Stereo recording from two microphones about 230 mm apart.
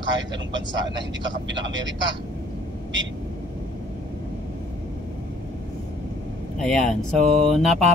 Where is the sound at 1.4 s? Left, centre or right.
Right.